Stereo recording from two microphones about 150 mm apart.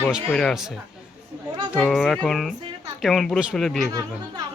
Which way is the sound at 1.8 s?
Centre (ahead or behind).